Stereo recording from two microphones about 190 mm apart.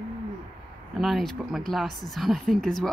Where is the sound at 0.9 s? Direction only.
Centre (ahead or behind).